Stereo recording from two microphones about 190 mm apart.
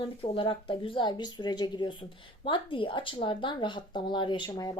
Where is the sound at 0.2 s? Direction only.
30° left (ahead or behind).